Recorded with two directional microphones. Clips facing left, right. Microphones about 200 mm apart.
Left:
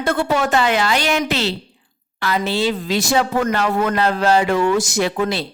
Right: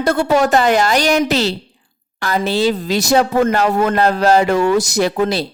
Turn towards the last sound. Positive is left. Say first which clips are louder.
# right 3 dB
turn(degrees=-40)  # may be behind; listen again after turning